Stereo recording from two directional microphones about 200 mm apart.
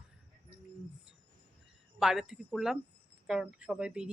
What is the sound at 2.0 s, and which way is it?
Speech, centre (ahead or behind).